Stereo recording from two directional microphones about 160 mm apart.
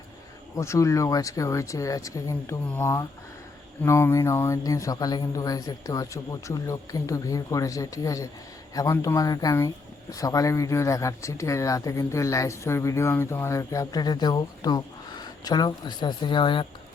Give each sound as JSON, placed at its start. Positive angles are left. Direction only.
{"t": 0.5, "sound": "speech", "side_deg": 20}